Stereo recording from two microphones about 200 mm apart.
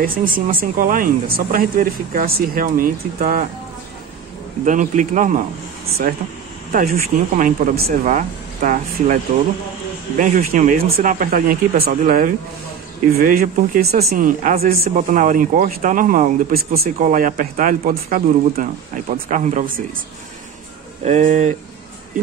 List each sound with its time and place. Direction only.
0.0 s speech: 45° right (ahead or behind)
4.6 s speech: 40° right (ahead or behind)
6.7 s speech: 45° right (ahead or behind)
21.0 s speech: 35° right (ahead or behind)